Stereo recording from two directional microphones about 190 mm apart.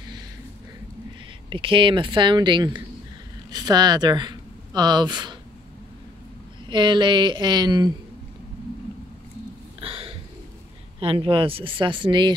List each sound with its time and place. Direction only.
1.5 s speech: 25° right (ahead or behind)
6.7 s speech: 25° right (ahead or behind)
9.8 s a sound: 30° right (ahead or behind)
11.0 s speech: 30° right (ahead or behind)